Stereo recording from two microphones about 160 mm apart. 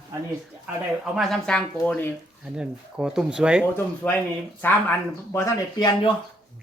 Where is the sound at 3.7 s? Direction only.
10° left (ahead or behind).